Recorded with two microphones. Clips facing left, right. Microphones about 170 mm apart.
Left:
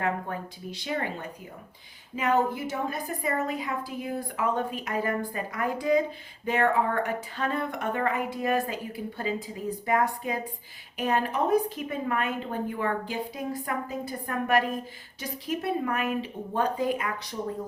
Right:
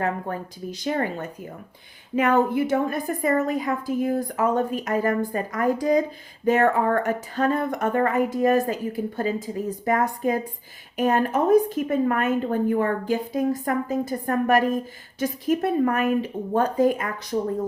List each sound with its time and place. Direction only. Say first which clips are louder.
0.0 s a woman's voice: right 3 dB; 40° right (ahead or behind)
2.1 s a woman's voice: right 6 dB; 60° right (ahead or behind); by 17.1 s 45° right (ahead or behind)
17.3 s speech: right 12 dB; 65° right (ahead or behind)